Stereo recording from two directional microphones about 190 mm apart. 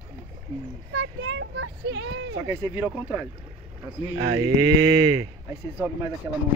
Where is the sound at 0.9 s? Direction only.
90° right.